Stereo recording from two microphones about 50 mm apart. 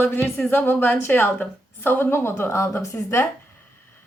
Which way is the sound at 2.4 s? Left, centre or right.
Left.